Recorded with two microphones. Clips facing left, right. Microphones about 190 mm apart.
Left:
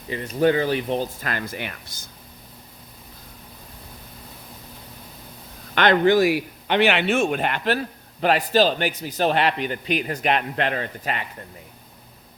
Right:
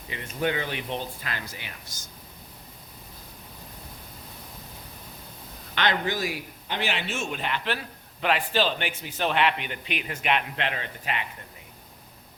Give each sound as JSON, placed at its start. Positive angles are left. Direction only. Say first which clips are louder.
{"t": 0.1, "sound": "a man's voice", "louder": "left 9 dB", "side_deg": 40}
{"t": 5.7, "sound": "a man's voice", "louder": "left 10 dB", "side_deg": 55}